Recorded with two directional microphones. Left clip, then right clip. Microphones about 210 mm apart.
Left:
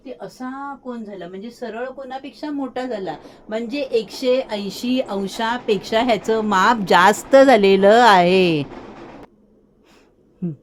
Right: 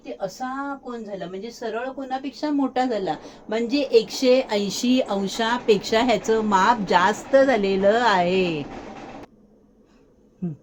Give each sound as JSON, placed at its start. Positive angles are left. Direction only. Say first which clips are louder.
{"t": 2.0, "sound": "a woman's voice", "louder": "right 3 dB", "side_deg": -15}
{"t": 6.1, "sound": "a woman's voice", "louder": "left 2 dB", "side_deg": 30}
{"t": 10.4, "sound": "speech", "louder": "left 4 dB", "side_deg": 35}